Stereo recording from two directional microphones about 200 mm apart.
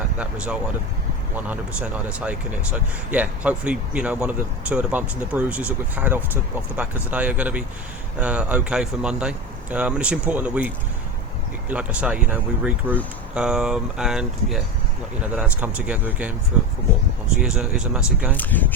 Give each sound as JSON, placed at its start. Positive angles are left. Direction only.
{"t": 0.2, "sound": "speech", "side_deg": -5}
{"t": 11.7, "sound": "speech", "side_deg": -5}
{"t": 18.3, "sound": "speech", "side_deg": 10}